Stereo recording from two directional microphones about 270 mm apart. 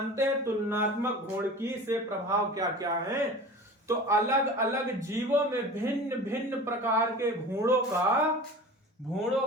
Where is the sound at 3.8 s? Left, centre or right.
Centre.